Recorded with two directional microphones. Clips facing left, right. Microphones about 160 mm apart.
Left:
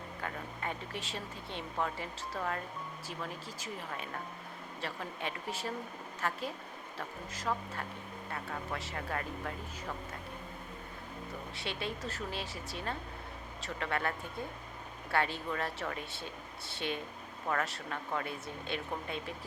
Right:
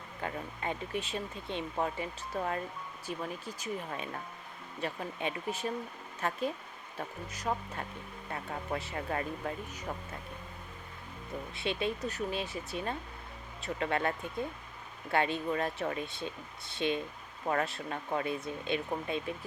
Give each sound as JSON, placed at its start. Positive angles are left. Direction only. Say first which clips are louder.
{"t": 0.2, "sound": "speech", "louder": "right 4 dB", "side_deg": -20}
{"t": 4.8, "sound": "speech", "louder": "right 4 dB", "side_deg": -20}
{"t": 7.5, "sound": "speech", "louder": "right 1 dB", "side_deg": -25}
{"t": 11.6, "sound": "speech", "louder": "right 6 dB", "side_deg": -20}
{"t": 15.1, "sound": "speech", "louder": "right 3 dB", "side_deg": -20}